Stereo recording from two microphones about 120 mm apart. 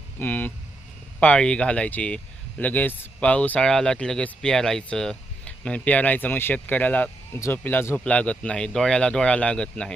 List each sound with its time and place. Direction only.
0.2 s speech: 15° left (ahead or behind)